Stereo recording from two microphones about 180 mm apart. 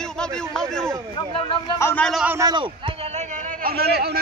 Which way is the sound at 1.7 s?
15° left (ahead or behind).